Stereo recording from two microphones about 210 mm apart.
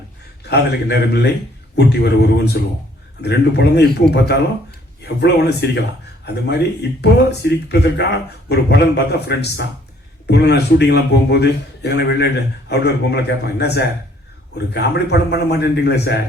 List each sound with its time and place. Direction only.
0.4 s a man's voice: 55° left (ahead or behind)